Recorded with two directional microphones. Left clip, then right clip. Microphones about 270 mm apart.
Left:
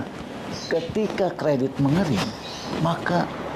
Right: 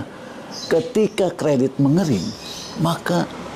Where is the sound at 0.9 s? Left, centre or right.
Right.